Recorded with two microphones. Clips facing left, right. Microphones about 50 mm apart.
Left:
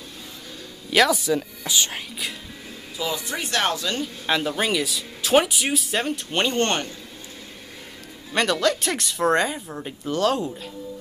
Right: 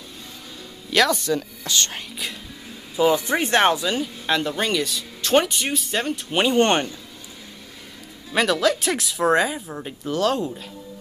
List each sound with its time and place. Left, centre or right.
0.8 s speech: centre
3.0 s speech: right
3.8 s speech: centre
4.3 s speech: centre
8.3 s speech: centre